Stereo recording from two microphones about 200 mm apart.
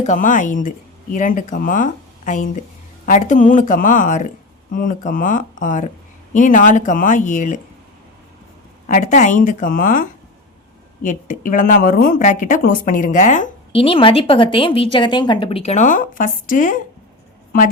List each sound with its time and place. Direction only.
0.0 s speech: 40° left (ahead or behind)
8.9 s a woman's voice: 40° left (ahead or behind)